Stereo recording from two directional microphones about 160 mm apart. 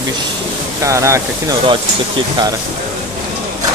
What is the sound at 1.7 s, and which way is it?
Speech, 30° right (ahead or behind).